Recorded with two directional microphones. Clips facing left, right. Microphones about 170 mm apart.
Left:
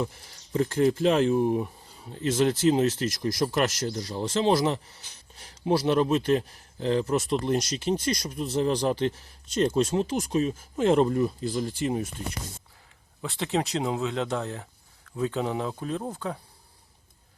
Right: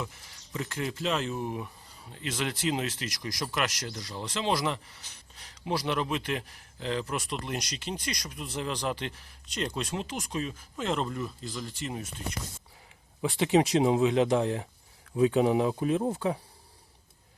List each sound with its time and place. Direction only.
0.0 s speech: 40° left (ahead or behind)
0.8 s speech: 50° left (ahead or behind)
2.1 s speech: 25° left (ahead or behind)
8.0 s speech: 45° left (ahead or behind)
8.4 s speech: 30° left (ahead or behind)
9.9 s speech: 25° left (ahead or behind)
10.6 s speech: 50° left (ahead or behind)
13.2 s speech: 15° right (ahead or behind)